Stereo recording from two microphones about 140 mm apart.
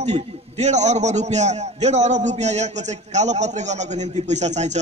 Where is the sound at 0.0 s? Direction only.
55° right (ahead or behind).